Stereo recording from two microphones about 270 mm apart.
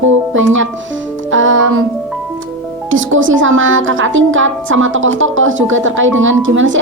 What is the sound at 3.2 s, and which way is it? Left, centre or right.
Speech, right.